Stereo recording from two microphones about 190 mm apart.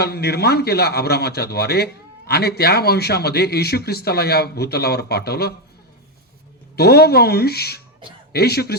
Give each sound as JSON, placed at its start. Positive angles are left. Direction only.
{"t": 0.0, "sound": "speech", "side_deg": 55}
{"t": 6.7, "sound": "speech", "side_deg": 55}